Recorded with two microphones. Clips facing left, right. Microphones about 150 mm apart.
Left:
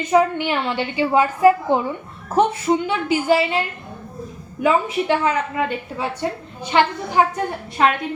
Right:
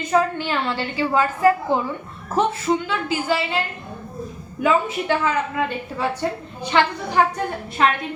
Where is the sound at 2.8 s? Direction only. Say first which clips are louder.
Left 4 dB; 20° left (ahead or behind).